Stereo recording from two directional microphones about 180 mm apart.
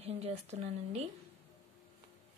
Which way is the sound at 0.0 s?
35° right (ahead or behind).